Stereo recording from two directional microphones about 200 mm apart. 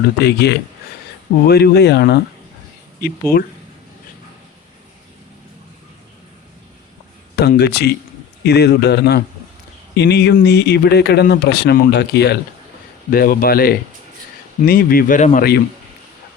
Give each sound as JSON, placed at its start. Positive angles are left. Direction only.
{"t": 0.2, "sound": "speech", "side_deg": 55}
{"t": 3.3, "sound": "speech", "side_deg": 10}
{"t": 7.3, "sound": "speech", "side_deg": 55}